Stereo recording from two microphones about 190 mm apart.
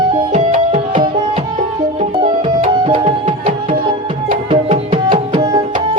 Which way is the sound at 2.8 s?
30° right (ahead or behind).